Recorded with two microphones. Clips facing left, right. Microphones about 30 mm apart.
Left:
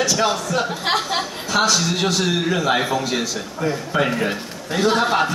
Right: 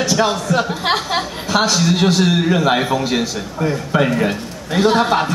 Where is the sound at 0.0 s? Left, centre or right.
Centre.